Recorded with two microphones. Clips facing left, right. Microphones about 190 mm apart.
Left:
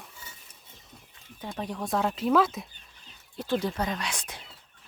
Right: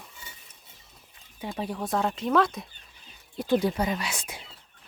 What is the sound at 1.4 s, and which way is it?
Speech, 5° right (ahead or behind).